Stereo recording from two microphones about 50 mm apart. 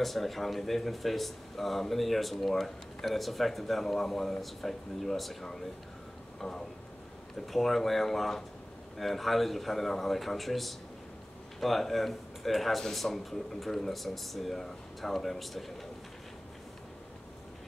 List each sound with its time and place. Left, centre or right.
0.0 s speech: centre